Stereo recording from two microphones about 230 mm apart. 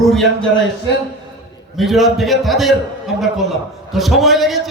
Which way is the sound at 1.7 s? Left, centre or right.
Centre.